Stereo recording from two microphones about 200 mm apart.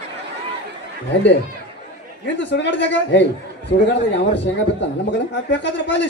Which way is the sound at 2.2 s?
65° left (ahead or behind).